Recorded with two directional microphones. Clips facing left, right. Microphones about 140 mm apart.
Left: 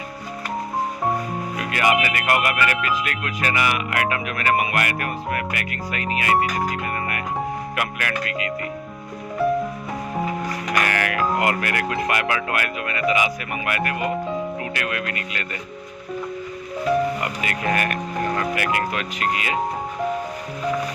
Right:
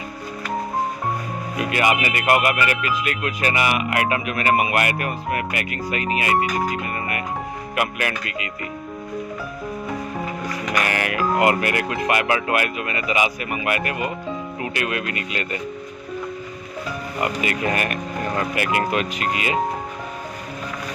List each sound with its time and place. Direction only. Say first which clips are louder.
1.7 s speech: left 1 dB; 15° right (ahead or behind)
7.8 s speech: right 5 dB; 20° right (ahead or behind)
10.8 s speech: even; 20° right (ahead or behind)
17.4 s speech: even; 20° right (ahead or behind)